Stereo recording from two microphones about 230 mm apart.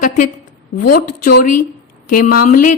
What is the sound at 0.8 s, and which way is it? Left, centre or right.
Speech, left.